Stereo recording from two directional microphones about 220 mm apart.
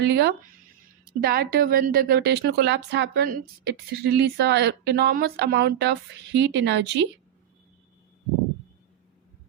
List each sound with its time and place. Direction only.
0.0 s speech: 50° right (ahead or behind)